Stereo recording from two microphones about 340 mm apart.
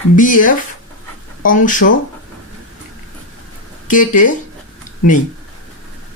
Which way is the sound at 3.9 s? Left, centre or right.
Left.